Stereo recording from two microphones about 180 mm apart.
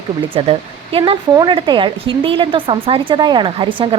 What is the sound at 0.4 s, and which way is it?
Speech, 35° right (ahead or behind).